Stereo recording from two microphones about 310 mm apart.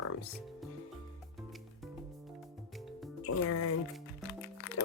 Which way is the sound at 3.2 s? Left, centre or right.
Left.